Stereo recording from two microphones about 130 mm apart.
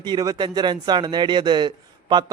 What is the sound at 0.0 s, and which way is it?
Speech, 30° right (ahead or behind).